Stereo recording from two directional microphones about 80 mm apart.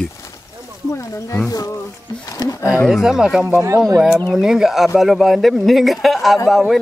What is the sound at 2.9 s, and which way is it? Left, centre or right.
Speech, centre.